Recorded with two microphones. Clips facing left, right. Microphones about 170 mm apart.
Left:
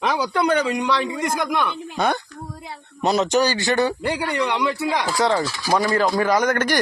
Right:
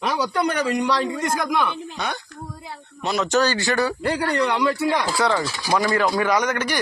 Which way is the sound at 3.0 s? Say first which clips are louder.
Left 4 dB; 35° left (ahead or behind).